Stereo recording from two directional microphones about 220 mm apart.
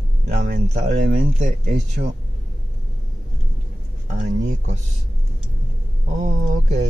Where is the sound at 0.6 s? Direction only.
35° right (ahead or behind).